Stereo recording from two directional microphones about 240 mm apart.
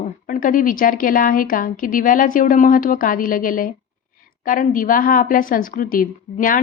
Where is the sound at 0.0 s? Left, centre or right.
Left.